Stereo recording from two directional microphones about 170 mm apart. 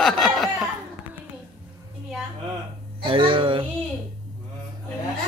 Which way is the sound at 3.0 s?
30° right (ahead or behind).